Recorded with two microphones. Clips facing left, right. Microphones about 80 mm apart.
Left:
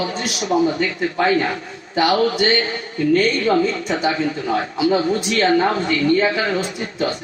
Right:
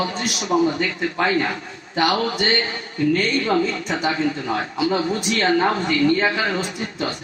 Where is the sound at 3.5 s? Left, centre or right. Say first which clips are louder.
Left 3 dB; left.